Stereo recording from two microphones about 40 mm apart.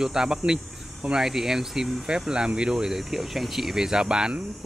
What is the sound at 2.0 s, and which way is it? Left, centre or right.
Speech, centre.